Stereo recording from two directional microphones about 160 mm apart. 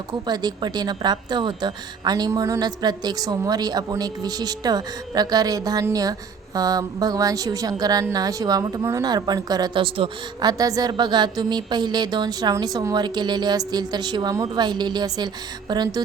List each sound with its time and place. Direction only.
0.1 s a woman's voice: 25° right (ahead or behind)